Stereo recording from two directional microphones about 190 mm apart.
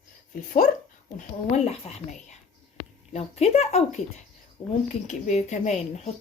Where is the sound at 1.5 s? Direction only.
35° left (ahead or behind).